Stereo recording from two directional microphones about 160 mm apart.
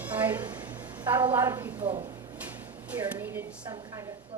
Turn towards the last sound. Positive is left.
turn(degrees=-15)  # may be behind; listen again after turning